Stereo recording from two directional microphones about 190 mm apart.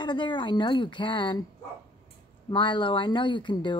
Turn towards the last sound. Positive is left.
turn(degrees=25)  # may be behind; listen again after turning